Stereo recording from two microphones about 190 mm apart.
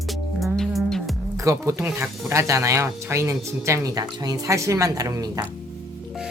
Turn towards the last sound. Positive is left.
turn(degrees=-20)  # may be behind; listen again after turning